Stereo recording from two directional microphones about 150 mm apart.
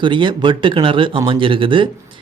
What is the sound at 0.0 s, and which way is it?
Speech, 30° right (ahead or behind).